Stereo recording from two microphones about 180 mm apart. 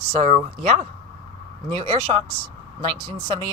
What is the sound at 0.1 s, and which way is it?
Speech, 35° right (ahead or behind).